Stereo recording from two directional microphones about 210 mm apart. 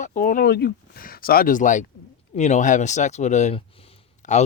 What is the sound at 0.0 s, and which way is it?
Speech, 40° left (ahead or behind).